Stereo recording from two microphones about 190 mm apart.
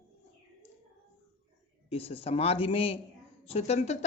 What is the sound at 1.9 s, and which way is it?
A woman's voice, 30° left (ahead or behind).